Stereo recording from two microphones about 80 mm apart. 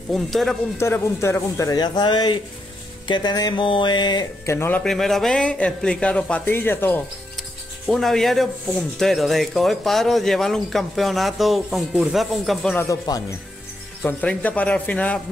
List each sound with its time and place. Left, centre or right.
0.1 s a man's voice: centre
0.7 s speech: left
1.8 s speech: left
4.5 s speech: left
4.8 s a man's voice: centre
6.4 s speech: left
7.9 s a man's voice: centre
13.1 s speech: left
14.0 s a man's voice: centre